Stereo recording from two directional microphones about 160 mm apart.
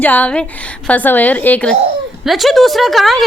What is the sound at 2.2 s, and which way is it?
A child's voice, centre (ahead or behind).